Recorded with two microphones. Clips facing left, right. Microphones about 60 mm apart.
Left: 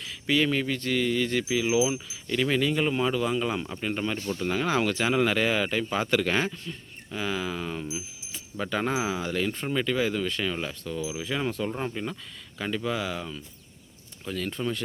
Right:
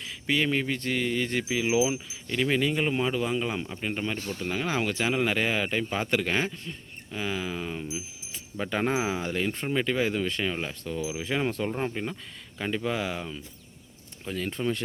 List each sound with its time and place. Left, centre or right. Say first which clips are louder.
0.0 s speech: left 2 dB; centre
2.3 s speech: left 1 dB; centre
14.3 s speech: even; right